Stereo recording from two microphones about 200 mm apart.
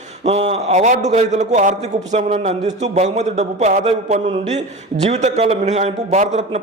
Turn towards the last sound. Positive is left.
turn(degrees=-35)  # may be behind; listen again after turning